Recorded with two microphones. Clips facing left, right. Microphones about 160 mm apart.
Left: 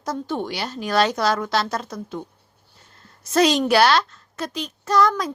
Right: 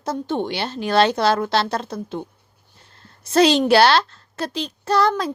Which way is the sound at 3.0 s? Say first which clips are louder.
Right 2 dB; 30° right (ahead or behind).